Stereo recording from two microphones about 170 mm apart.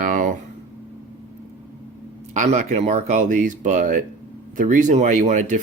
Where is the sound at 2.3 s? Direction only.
45° right (ahead or behind).